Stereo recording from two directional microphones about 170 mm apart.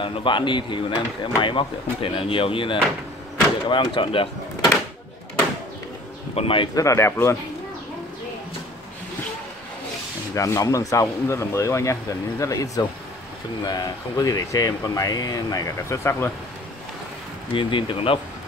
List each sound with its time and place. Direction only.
0.0 s speech: 30° left (ahead or behind)
6.3 s speech: 30° left (ahead or behind); by 7.3 s 15° left (ahead or behind)
10.3 s speech: 15° left (ahead or behind)
17.5 s speech: 30° left (ahead or behind)